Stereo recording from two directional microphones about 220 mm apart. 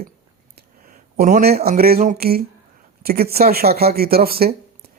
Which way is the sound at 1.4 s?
45° right (ahead or behind).